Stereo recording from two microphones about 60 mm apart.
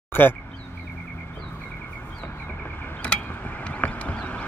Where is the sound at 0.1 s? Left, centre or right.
Left.